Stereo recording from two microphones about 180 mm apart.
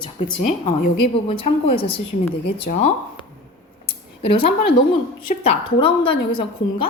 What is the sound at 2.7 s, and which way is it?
Speech, 50° left (ahead or behind).